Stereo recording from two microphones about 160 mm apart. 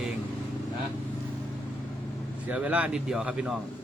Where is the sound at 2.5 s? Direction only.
10° right (ahead or behind).